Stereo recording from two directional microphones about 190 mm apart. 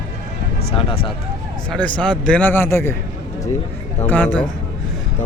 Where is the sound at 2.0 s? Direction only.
5° left (ahead or behind).